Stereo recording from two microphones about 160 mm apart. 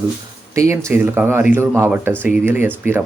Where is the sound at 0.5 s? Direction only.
20° right (ahead or behind).